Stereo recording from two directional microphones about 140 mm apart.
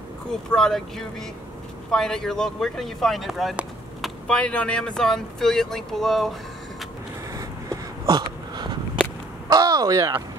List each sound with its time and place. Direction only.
0.5 s speech: 5° left (ahead or behind)
7.3 s a sound: 25° right (ahead or behind)
9.5 s speech: 25° right (ahead or behind)